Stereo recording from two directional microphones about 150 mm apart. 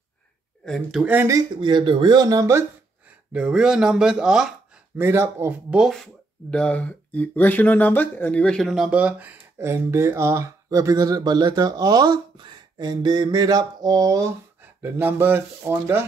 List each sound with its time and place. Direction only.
0.7 s speech: centre (ahead or behind)
1.2 s speech: 25° right (ahead or behind)
3.3 s speech: 5° right (ahead or behind)
5.0 s speech: 15° right (ahead or behind)
5.8 s speech: centre (ahead or behind); by 16.1 s 15° right (ahead or behind)